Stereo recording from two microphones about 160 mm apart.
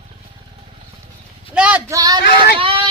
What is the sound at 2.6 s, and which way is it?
Speech, 35° right (ahead or behind).